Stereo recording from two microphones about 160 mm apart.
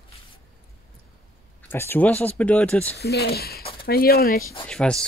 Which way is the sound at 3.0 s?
80° left.